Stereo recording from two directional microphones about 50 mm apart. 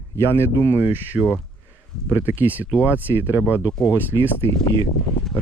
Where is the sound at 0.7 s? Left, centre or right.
Right.